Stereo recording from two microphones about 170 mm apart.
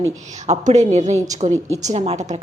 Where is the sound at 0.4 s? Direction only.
40° right (ahead or behind).